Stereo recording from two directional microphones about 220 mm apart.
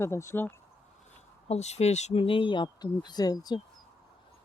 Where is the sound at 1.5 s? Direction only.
30° left (ahead or behind).